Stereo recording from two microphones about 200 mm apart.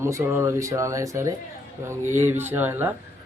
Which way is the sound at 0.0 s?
15° right (ahead or behind).